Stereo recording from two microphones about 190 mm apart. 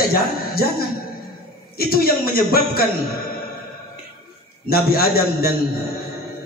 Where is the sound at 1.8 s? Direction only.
55° left (ahead or behind).